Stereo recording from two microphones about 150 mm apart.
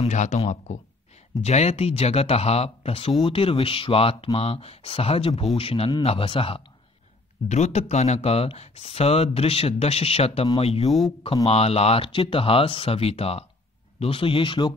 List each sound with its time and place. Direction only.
0.0 s speech: 50° left (ahead or behind); by 6.6 s 35° left (ahead or behind)
7.4 s speech: 50° left (ahead or behind); by 14.7 s 35° left (ahead or behind)